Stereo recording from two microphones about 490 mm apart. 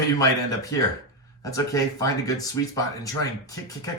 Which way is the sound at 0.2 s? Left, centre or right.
Centre.